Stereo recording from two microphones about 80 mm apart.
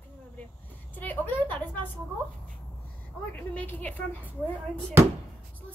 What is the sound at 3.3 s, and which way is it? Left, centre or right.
Speech, left.